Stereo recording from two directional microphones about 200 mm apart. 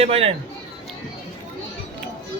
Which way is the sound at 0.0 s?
30° right (ahead or behind).